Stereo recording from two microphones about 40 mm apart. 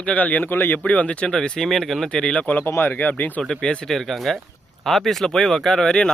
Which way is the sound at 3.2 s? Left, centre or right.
Left.